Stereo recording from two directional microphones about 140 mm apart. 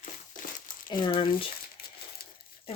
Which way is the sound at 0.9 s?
35° left (ahead or behind).